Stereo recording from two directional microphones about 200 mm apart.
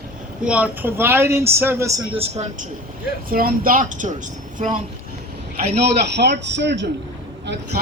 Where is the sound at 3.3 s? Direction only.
45° right (ahead or behind).